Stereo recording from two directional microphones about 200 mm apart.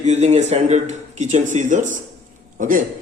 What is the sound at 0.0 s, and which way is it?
Speech, 35° right (ahead or behind).